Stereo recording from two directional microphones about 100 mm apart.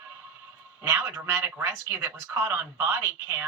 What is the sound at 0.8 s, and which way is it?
Speech, 25° right (ahead or behind).